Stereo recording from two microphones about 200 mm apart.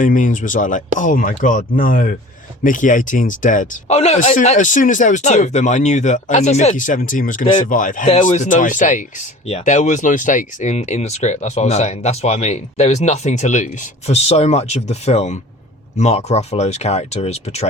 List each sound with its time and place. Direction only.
0.0 s speech: 40° left (ahead or behind)